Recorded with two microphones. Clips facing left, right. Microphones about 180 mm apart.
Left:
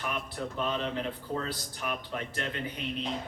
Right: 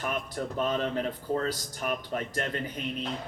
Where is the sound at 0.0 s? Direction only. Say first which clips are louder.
Right 3 dB; 40° right (ahead or behind).